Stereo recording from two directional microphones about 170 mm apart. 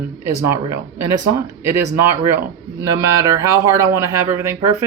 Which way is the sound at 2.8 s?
20° right (ahead or behind).